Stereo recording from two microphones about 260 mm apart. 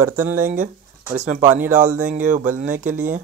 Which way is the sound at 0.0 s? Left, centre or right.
Centre.